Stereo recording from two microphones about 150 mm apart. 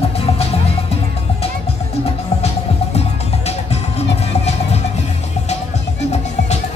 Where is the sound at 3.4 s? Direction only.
45° left (ahead or behind).